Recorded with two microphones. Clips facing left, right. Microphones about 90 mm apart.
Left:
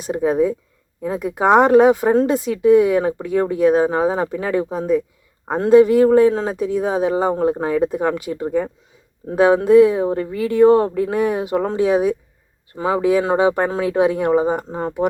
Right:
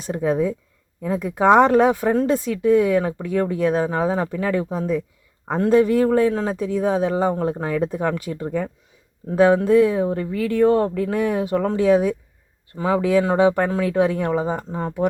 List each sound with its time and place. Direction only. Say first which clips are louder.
0.1 s speech: left 3 dB; 15° left (ahead or behind)